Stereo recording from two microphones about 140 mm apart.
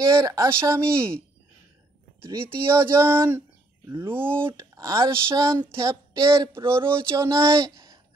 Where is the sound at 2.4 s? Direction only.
15° right (ahead or behind).